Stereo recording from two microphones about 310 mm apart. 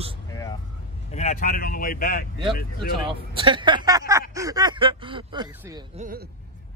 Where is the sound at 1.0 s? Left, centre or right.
Left.